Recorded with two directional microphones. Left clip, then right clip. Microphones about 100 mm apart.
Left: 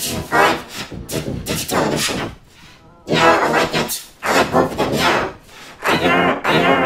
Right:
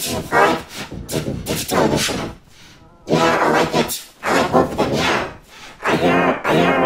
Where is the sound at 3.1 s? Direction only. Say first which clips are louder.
Left 2 dB; 10° right (ahead or behind).